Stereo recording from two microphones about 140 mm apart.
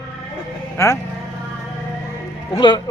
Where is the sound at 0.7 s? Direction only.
20° left (ahead or behind).